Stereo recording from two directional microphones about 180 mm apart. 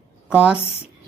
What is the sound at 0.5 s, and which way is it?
Speech, 35° left (ahead or behind).